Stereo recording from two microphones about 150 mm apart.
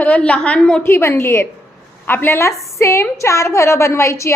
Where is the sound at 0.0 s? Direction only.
10° left (ahead or behind).